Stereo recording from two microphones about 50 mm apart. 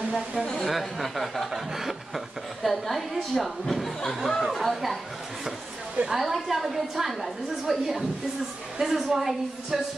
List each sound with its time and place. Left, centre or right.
0.1 s a woman's voice: right
0.7 s speech: centre
6.0 s a woman's voice: centre